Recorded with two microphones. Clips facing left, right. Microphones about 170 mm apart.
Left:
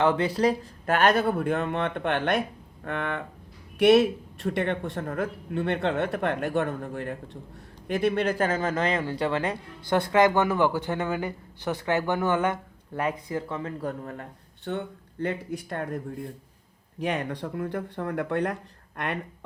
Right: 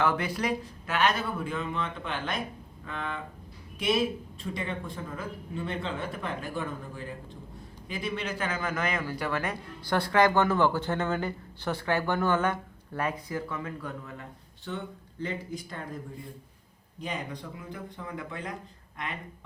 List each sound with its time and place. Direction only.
0.0 s speech: 25° left (ahead or behind)
0.9 s speech: 50° left (ahead or behind)
8.5 s speech: 30° left (ahead or behind); by 19.5 s 80° left